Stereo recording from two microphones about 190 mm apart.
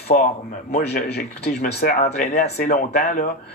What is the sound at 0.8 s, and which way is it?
A man's voice, 60° left (ahead or behind).